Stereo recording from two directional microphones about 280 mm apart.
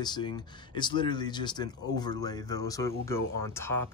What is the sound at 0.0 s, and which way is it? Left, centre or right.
Speech, centre.